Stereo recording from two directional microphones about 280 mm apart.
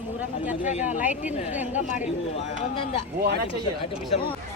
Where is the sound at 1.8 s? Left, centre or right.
Left.